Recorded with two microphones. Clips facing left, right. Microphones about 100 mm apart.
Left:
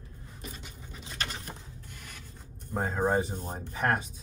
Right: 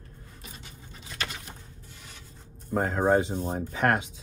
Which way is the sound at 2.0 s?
50° left (ahead or behind).